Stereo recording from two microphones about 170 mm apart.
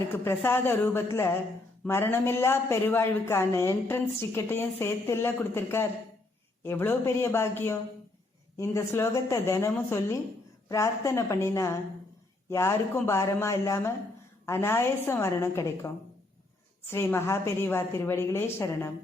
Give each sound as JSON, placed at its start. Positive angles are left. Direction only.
{"t": 0.1, "sound": "a woman's voice", "side_deg": 15}
{"t": 16.9, "sound": "a woman's voice", "side_deg": 15}